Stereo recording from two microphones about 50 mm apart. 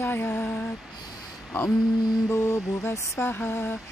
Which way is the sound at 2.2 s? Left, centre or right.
Left.